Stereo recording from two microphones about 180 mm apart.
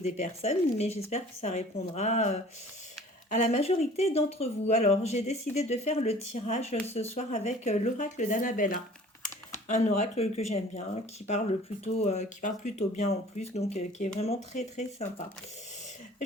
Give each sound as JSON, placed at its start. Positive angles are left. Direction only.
{"t": 0.0, "sound": "speech", "side_deg": 35}